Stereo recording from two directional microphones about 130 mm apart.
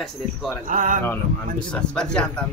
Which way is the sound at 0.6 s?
90° right.